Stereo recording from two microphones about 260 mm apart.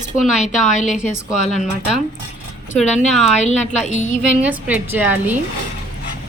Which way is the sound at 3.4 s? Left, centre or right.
Left.